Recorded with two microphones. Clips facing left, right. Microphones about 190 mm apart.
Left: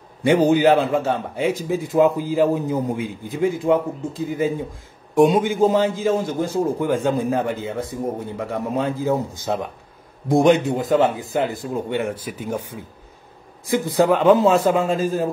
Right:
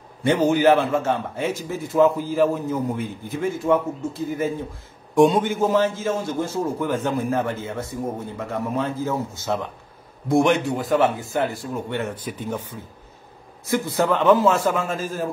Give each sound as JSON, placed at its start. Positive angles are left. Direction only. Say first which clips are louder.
{"t": 0.2, "sound": "a man's voice", "louder": "left 3 dB", "side_deg": 15}
{"t": 13.7, "sound": "a man's voice", "louder": "left 4 dB", "side_deg": 15}